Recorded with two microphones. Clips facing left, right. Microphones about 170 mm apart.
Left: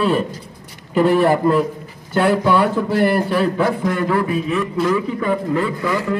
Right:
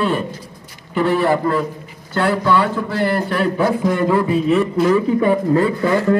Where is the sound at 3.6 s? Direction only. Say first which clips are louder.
Right 2 dB; 15° right (ahead or behind); by 6.2 s 45° right (ahead or behind).